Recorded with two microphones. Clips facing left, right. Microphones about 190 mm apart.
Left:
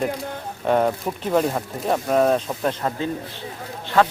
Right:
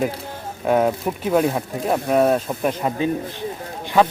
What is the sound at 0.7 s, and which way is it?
Speech, 5° right (ahead or behind).